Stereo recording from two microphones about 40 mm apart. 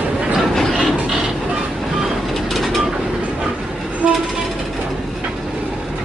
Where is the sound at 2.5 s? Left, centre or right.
Centre.